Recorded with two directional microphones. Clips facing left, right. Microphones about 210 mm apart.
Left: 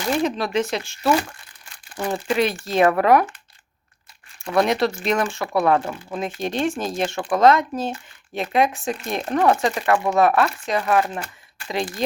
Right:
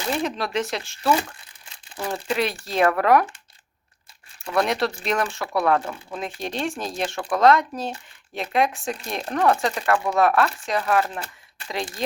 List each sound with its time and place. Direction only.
0.2 s speech: centre (ahead or behind)
2.0 s speech: 30° left (ahead or behind)
2.3 s speech: centre (ahead or behind)
4.5 s speech: centre (ahead or behind)